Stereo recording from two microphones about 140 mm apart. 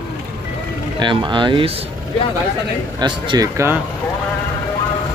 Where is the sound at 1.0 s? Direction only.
35° right (ahead or behind).